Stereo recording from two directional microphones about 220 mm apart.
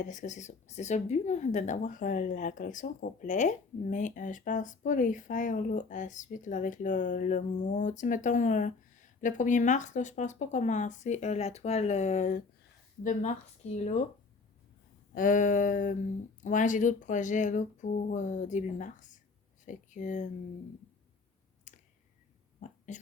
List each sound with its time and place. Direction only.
0.0 s speech: 35° left (ahead or behind)
13.7 s speech: 30° left (ahead or behind)
15.1 s speech: 35° left (ahead or behind)
21.7 s clicking: 35° left (ahead or behind)
22.9 s speech: 35° left (ahead or behind)